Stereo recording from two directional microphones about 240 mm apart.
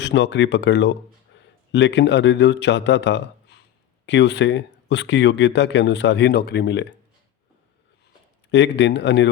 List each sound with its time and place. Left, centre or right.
0.0 s speech: left
8.4 s speech: left